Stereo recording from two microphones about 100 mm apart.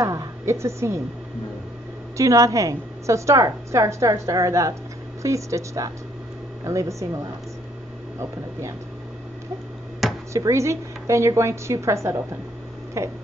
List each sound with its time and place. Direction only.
0.0 s a woman's voice: 35° right (ahead or behind)
2.1 s a woman's voice: 35° right (ahead or behind)
8.2 s a woman's voice: 30° right (ahead or behind)
10.3 s a woman's voice: 30° right (ahead or behind)